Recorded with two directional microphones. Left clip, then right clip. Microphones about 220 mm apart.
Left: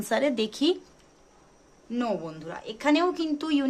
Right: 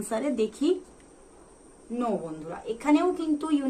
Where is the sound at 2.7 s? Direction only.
45° left (ahead or behind).